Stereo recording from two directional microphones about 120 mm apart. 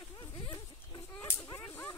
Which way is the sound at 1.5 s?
30° left (ahead or behind).